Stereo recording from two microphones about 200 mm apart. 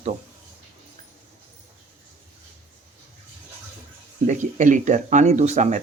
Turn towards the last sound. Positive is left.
turn(degrees=-35)  # may be behind; listen again after turning